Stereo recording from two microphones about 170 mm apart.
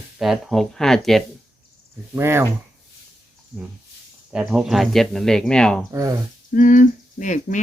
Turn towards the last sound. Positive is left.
turn(degrees=50)  # may be behind; listen again after turning